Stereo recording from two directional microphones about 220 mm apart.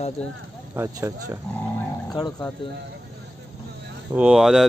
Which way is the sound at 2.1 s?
15° left (ahead or behind).